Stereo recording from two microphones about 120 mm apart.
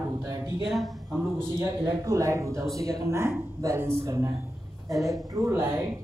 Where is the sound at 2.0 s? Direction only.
25° right (ahead or behind).